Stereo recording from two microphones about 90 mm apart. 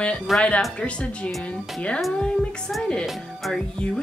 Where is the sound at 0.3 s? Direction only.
Centre (ahead or behind).